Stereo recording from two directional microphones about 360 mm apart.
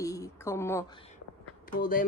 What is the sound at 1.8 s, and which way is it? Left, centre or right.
Speech, left.